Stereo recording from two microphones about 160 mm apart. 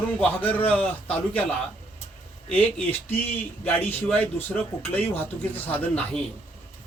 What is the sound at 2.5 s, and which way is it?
Speech, 10° left (ahead or behind).